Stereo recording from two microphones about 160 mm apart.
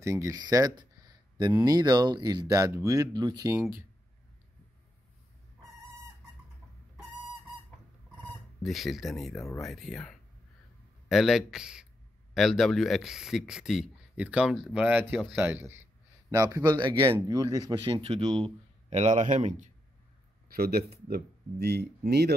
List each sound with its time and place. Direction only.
0.0 s speech: 20° right (ahead or behind)
8.6 s a man's voice: centre (ahead or behind); by 19.7 s 50° right (ahead or behind)
20.4 s speech: 75° right (ahead or behind); by 22.3 s 90° right